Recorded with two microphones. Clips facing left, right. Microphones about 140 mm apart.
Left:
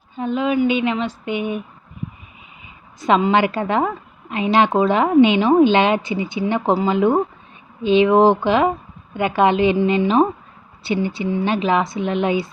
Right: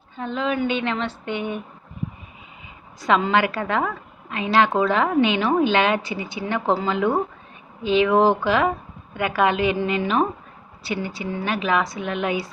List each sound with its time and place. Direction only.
0.2 s a woman's voice: 15° left (ahead or behind)
3.0 s a woman's voice: 20° left (ahead or behind)